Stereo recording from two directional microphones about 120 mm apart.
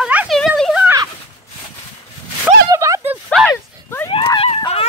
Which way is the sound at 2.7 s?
25° right (ahead or behind).